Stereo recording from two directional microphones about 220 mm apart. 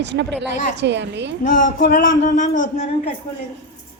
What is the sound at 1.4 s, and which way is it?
Speech, 35° left (ahead or behind).